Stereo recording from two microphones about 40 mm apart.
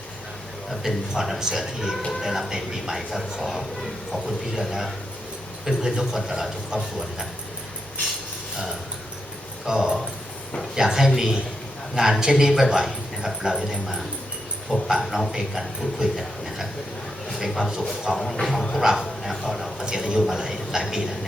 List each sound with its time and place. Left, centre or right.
0.7 s a man's voice: centre
6.7 s speech: centre
9.6 s speech: centre
17.2 s a sound: centre
17.6 s speech: centre
18.4 s dog: centre
18.8 s speech: centre
19.8 s speech: centre